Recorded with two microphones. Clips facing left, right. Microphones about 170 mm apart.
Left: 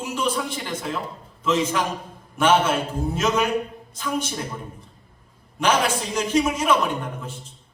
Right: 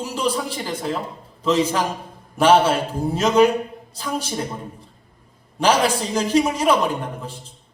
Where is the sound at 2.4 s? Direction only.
35° right (ahead or behind).